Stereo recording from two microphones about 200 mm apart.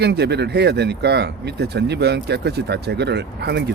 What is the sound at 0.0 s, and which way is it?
Speech, 55° right (ahead or behind).